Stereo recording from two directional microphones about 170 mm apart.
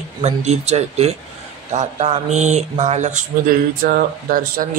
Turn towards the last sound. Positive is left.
turn(degrees=-60)  # may be behind; listen again after turning